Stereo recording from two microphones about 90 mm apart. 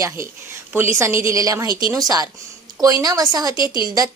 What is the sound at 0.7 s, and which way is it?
A woman's voice, 30° right (ahead or behind).